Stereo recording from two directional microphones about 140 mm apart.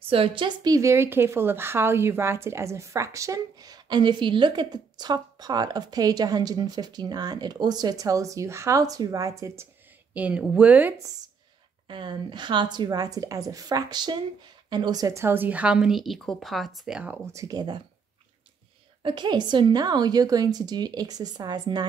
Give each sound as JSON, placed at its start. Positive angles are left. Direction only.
{"t": 0.1, "sound": "a woman's voice", "side_deg": -40}
{"t": 10.1, "sound": "a woman's voice", "side_deg": -10}
{"t": 11.9, "sound": "a woman's voice", "side_deg": -35}
{"t": 17.3, "sound": "a woman's voice", "side_deg": -25}
{"t": 19.0, "sound": "a woman's voice", "side_deg": -35}